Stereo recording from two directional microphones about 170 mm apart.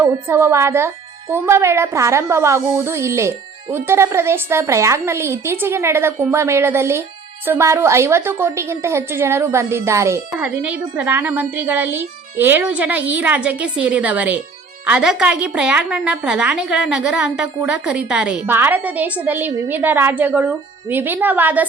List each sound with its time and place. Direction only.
0.0 s a woman's voice: 15° right (ahead or behind)